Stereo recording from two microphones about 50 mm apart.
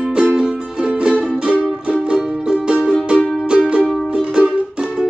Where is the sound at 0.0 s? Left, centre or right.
Centre.